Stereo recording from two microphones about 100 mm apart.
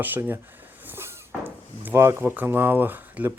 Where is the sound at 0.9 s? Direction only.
25° right (ahead or behind).